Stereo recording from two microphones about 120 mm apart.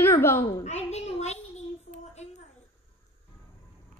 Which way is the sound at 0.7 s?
65° left (ahead or behind).